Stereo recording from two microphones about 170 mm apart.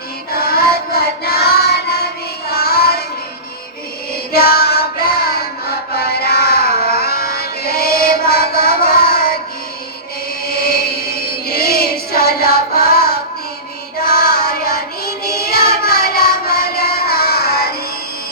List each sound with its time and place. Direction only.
0.3 s child singing: 65° left (ahead or behind)
2.5 s music: 65° left (ahead or behind)
4.3 s child singing: 65° left (ahead or behind)
5.9 s music: 65° left (ahead or behind)
10.4 s a sound: 65° left (ahead or behind)
11.2 s music: 65° left (ahead or behind)